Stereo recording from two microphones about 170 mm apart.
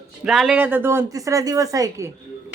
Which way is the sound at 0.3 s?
Centre (ahead or behind).